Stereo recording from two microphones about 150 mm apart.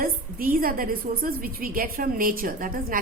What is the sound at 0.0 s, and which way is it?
A woman's voice, 75° right (ahead or behind).